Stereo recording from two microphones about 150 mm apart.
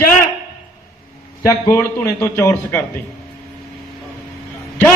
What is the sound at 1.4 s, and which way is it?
A man's voice, 20° left (ahead or behind).